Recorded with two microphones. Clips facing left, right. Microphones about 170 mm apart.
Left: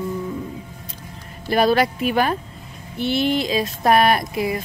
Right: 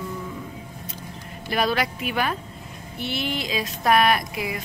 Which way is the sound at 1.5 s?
40° left (ahead or behind).